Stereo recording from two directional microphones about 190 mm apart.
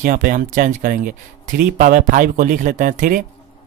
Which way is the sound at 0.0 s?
45° right (ahead or behind).